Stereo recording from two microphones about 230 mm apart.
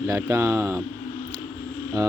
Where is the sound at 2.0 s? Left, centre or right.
Centre.